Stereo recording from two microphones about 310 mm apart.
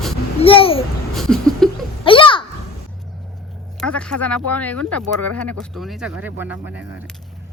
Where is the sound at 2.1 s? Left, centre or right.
Centre.